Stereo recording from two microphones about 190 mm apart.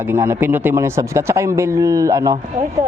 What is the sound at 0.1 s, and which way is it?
Speech, 15° right (ahead or behind).